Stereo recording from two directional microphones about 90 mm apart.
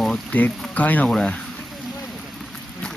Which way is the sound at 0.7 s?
15° left (ahead or behind).